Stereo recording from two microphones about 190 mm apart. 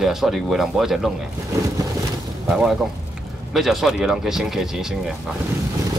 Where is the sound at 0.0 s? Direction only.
Centre (ahead or behind).